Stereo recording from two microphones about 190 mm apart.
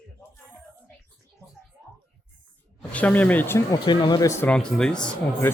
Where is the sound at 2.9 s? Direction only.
10° left (ahead or behind).